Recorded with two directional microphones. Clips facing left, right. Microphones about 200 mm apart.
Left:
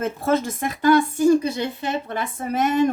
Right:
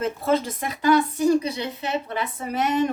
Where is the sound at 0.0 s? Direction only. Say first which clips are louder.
Left 1 dB; 50° left (ahead or behind).